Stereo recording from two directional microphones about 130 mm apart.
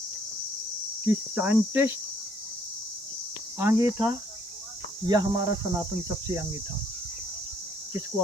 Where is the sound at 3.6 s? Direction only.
20° right (ahead or behind).